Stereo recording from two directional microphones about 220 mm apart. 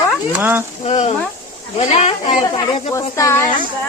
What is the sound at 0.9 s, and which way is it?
Speech, 30° left (ahead or behind).